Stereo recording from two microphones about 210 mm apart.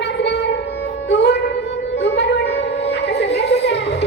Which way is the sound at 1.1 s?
55° left (ahead or behind).